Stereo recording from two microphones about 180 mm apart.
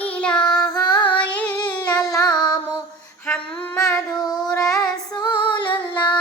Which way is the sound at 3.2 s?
10° left (ahead or behind).